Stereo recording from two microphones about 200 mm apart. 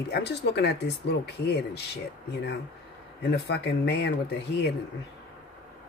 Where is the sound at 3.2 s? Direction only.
60° left (ahead or behind).